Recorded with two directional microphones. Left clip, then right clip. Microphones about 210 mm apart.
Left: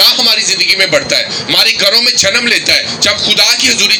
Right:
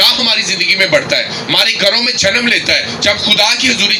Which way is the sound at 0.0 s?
50° left (ahead or behind).